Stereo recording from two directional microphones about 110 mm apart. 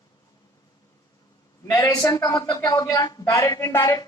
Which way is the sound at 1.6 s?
30° left (ahead or behind).